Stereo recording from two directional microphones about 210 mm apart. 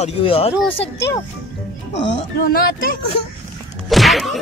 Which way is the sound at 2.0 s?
45° left (ahead or behind).